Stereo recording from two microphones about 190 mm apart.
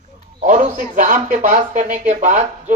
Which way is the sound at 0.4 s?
40° right (ahead or behind).